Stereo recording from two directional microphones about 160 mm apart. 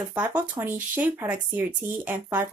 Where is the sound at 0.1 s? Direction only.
10° right (ahead or behind).